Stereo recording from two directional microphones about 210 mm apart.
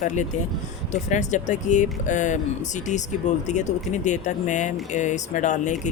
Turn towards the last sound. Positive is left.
turn(degrees=35)  # may be behind; listen again after turning